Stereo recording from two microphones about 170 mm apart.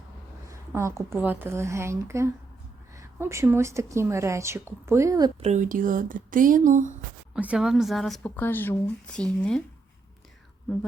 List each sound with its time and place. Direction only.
0.5 s speech: 15° right (ahead or behind)
5.4 s speech: 45° right (ahead or behind)
7.3 s speech: 5° right (ahead or behind)